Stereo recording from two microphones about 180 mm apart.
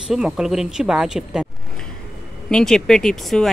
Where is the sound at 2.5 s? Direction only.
5° left (ahead or behind).